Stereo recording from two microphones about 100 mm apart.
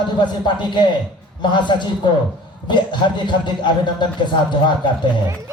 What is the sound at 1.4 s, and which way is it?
A man's voice, 50° left (ahead or behind).